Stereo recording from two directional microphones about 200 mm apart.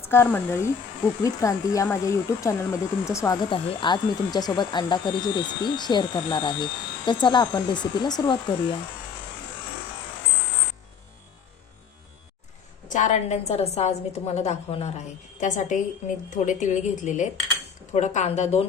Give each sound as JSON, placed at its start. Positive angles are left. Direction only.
{"t": 0.0, "sound": "speech", "side_deg": 10}
{"t": 12.9, "sound": "a woman's voice", "side_deg": 35}